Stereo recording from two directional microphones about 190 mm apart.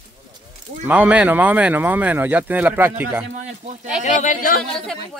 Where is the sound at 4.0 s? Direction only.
40° left (ahead or behind).